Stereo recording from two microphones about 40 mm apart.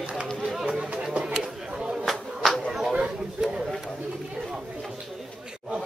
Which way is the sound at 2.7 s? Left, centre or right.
Centre.